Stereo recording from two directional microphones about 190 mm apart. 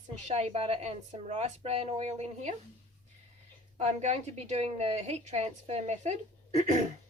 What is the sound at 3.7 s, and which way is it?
A woman's voice, 35° right (ahead or behind).